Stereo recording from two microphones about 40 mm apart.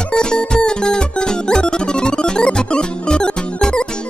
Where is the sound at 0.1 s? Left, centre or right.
Centre.